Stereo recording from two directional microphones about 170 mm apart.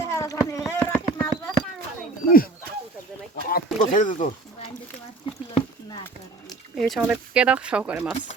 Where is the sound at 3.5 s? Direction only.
55° left (ahead or behind).